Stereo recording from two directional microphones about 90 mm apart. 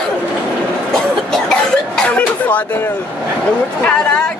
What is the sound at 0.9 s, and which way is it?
Cough, 5° left (ahead or behind).